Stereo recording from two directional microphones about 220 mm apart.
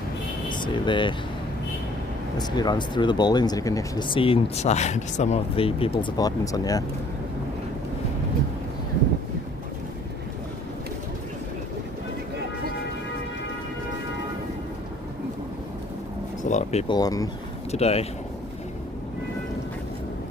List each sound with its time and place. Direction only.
0.4 s speech: 20° left (ahead or behind)
2.4 s speech: 20° left (ahead or behind)
16.4 s a sound: 35° left (ahead or behind)
16.9 s speech: 15° left (ahead or behind)
17.7 s speech: 30° left (ahead or behind)